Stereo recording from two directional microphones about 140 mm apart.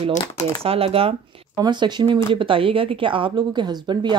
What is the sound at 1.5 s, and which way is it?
Speech, 30° right (ahead or behind).